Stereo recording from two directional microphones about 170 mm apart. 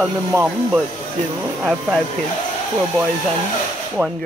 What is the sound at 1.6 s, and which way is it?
Speech, centre (ahead or behind).